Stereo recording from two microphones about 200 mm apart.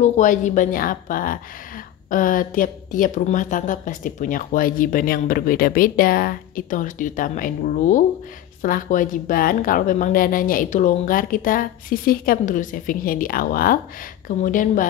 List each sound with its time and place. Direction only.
0.0 s speech: 40° left (ahead or behind)